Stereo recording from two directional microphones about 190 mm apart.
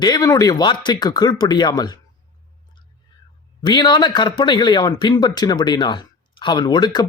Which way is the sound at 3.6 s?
25° left (ahead or behind).